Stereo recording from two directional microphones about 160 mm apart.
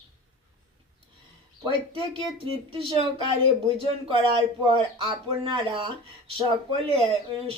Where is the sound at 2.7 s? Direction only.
35° right (ahead or behind).